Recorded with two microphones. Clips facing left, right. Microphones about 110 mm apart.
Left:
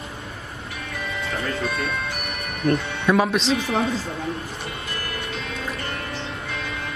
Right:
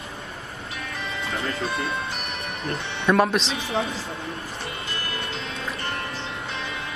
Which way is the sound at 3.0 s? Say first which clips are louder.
Left 1 dB; centre (ahead or behind).